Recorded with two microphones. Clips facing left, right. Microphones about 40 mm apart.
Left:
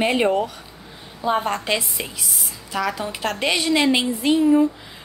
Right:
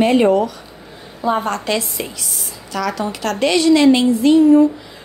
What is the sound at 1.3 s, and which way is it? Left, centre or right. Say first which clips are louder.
A woman's voice: right 2 dB; centre.